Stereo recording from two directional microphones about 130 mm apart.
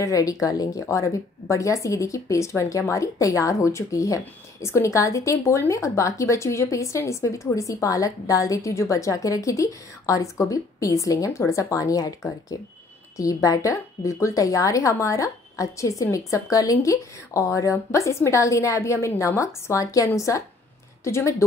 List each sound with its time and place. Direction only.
0.0 s speech: 25° left (ahead or behind)